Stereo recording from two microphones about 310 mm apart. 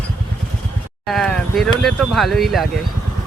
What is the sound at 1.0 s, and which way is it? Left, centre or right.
Speech, centre.